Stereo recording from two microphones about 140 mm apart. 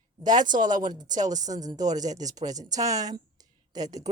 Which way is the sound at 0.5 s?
70° right (ahead or behind).